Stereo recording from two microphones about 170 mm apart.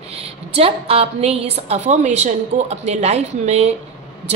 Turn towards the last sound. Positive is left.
turn(degrees=-40)  # may be behind; listen again after turning